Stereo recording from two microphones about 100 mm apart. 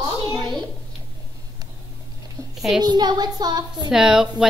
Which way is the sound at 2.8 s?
45° right (ahead or behind).